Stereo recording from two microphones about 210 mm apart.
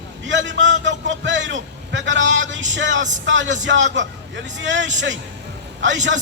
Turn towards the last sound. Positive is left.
turn(degrees=-60)  # may be behind; listen again after turning